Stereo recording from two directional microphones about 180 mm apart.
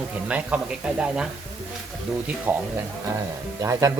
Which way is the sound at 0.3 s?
5° right (ahead or behind).